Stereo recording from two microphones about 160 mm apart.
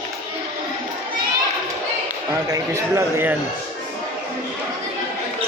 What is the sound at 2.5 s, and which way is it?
Speech, 15° right (ahead or behind).